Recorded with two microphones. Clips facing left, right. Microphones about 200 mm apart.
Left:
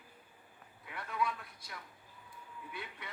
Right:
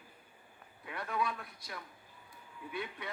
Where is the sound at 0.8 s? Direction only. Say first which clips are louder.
Right 1 dB; 60° right (ahead or behind).